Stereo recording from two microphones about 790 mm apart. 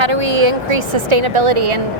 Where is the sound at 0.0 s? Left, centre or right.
Right.